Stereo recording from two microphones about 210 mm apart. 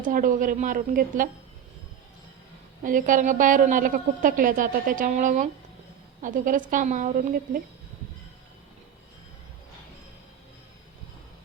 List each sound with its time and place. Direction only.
0.0 s a woman's voice: 40° right (ahead or behind)
2.8 s a woman's voice: 40° right (ahead or behind)